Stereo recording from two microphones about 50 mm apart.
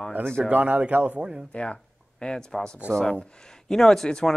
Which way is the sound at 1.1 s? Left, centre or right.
Centre.